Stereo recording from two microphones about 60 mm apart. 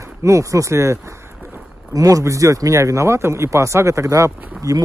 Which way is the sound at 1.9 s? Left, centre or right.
Right.